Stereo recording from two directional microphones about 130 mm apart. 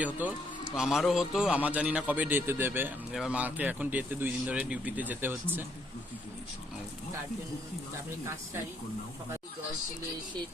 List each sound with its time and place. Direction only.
0.0 s speech: 10° right (ahead or behind)